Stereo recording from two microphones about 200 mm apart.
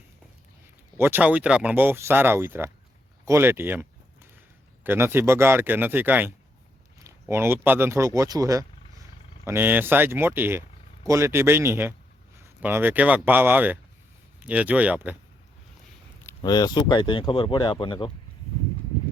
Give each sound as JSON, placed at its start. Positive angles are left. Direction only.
{"t": 0.9, "sound": "speech", "side_deg": -10}
{"t": 3.2, "sound": "a sound", "side_deg": -15}
{"t": 4.8, "sound": "speech", "side_deg": -10}
{"t": 16.2, "sound": "speech", "side_deg": 20}